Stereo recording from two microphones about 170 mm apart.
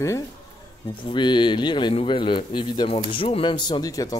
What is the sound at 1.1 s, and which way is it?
A man's voice, 25° left (ahead or behind).